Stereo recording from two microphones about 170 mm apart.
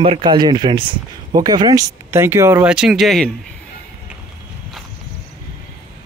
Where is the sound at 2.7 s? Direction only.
5° right (ahead or behind).